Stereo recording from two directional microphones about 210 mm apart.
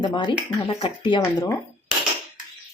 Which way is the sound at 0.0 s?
20° left (ahead or behind).